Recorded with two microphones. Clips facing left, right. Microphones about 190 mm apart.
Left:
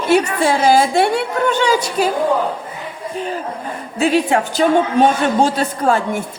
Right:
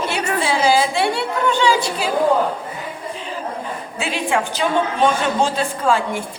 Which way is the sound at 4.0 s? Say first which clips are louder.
Left 6 dB; 40° left (ahead or behind).